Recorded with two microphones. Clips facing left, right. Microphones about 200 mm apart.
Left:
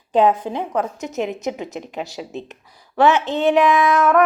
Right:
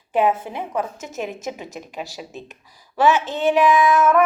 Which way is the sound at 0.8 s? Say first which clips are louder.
Left 3 dB; 20° left (ahead or behind).